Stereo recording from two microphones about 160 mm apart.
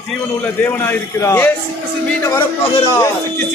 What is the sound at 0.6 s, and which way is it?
Speech, 15° left (ahead or behind).